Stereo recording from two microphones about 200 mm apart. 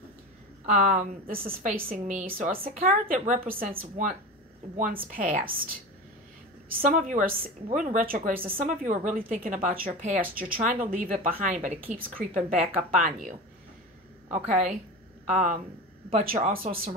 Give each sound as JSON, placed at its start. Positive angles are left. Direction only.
{"t": 0.7, "sound": "a woman's voice", "side_deg": -35}
{"t": 5.0, "sound": "a woman's voice", "side_deg": -45}
{"t": 14.3, "sound": "a woman's voice", "side_deg": -5}
{"t": 15.2, "sound": "a woman's voice", "side_deg": -40}